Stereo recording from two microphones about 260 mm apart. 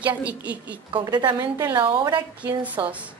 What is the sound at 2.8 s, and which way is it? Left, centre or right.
Speech, centre.